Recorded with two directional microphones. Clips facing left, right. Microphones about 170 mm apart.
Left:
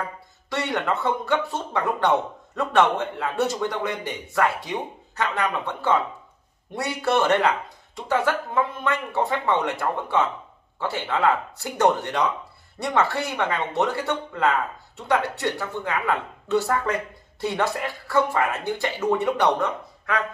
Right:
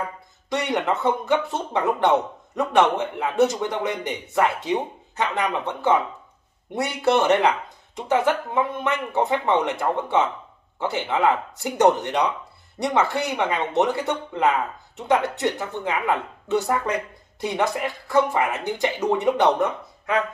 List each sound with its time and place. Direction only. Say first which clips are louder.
0.5 s speech: right 2 dB; 20° right (ahead or behind)